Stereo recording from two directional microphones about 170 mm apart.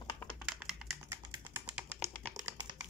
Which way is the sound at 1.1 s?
15° right (ahead or behind).